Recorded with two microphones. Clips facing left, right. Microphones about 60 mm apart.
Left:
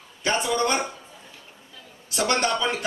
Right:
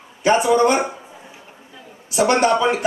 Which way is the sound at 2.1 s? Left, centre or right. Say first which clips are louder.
Right 8 dB; right.